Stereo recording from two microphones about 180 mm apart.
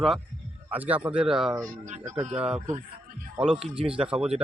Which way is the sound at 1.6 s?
45° right (ahead or behind).